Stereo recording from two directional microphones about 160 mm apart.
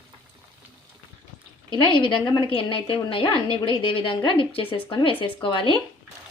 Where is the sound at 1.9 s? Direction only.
30° left (ahead or behind).